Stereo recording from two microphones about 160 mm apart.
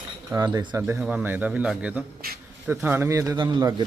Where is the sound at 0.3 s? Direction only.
25° right (ahead or behind).